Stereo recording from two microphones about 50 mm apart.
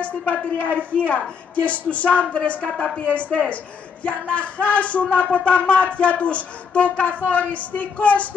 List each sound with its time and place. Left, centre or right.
0.0 s speech: left